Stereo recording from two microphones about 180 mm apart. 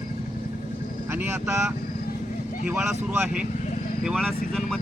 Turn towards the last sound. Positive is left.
turn(degrees=0)  # may be behind; listen again after turning